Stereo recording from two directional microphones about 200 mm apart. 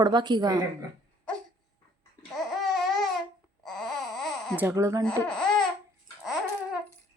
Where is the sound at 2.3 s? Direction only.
Centre (ahead or behind).